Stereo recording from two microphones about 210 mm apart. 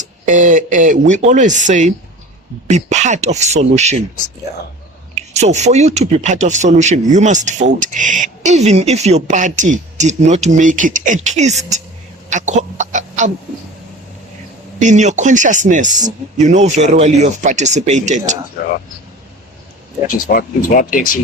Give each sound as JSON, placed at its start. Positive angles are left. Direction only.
{"t": 0.3, "sound": "speech", "side_deg": -35}
{"t": 5.3, "sound": "speech", "side_deg": -30}
{"t": 12.3, "sound": "chicken", "side_deg": -35}
{"t": 14.8, "sound": "speech", "side_deg": -35}
{"t": 20.1, "sound": "speech", "side_deg": 40}